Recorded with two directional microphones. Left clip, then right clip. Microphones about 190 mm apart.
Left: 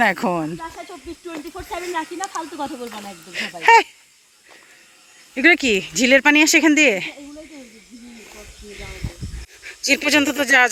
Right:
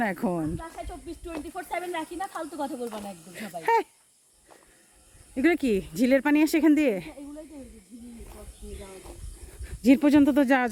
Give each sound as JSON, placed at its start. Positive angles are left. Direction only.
{"t": 0.0, "sound": "speech", "side_deg": 5}
{"t": 1.5, "sound": "speech", "side_deg": -20}
{"t": 2.9, "sound": "speech", "side_deg": 0}
{"t": 5.3, "sound": "speech", "side_deg": -10}
{"t": 9.6, "sound": "speech", "side_deg": -5}